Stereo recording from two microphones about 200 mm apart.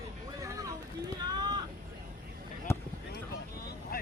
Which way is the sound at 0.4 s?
15° right (ahead or behind).